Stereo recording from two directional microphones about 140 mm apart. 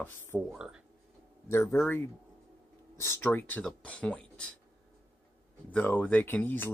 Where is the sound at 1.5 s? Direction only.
20° left (ahead or behind).